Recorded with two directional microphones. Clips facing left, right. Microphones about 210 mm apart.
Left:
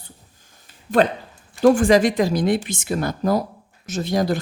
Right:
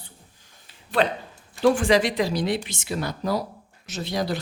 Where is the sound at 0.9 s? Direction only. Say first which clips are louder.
Left 5 dB; 45° left (ahead or behind).